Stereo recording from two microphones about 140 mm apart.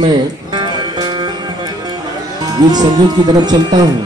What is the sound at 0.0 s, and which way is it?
Music, 35° right (ahead or behind).